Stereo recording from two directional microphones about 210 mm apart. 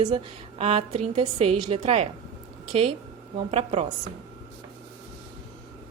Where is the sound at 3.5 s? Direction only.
30° right (ahead or behind).